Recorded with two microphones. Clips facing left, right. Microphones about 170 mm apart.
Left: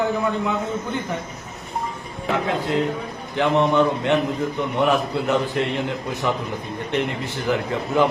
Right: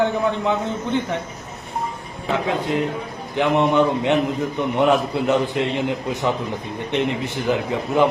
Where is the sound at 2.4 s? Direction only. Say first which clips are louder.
Even; 20° right (ahead or behind).